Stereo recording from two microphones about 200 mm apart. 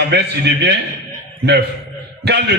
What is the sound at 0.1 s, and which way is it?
Speech, 60° right (ahead or behind).